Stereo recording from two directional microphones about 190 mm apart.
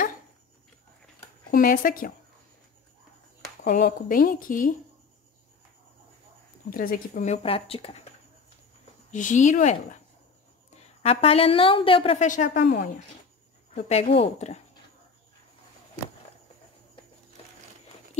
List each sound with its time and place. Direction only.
1.5 s a woman's voice: 45° left (ahead or behind)
3.6 s a woman's voice: 45° left (ahead or behind)
6.7 s a woman's voice: 50° left (ahead or behind); by 8.1 s 30° left (ahead or behind)
9.1 s a woman's voice: 40° left (ahead or behind); by 12.8 s 55° left (ahead or behind)
13.7 s a woman's voice: 30° left (ahead or behind)